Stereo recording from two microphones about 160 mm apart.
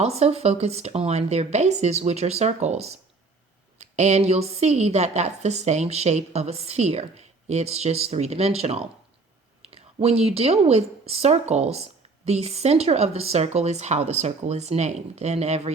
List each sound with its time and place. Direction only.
0.0 s a woman's voice: 40° right (ahead or behind)